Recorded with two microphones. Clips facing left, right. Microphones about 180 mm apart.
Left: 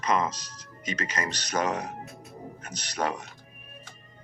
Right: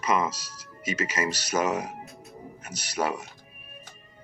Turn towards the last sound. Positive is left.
turn(degrees=-10)  # may be behind; listen again after turning